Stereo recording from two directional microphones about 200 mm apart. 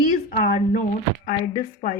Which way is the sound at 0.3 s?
40° left (ahead or behind).